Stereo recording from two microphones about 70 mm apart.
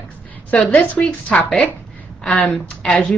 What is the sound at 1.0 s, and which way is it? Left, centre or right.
A woman's voice, centre.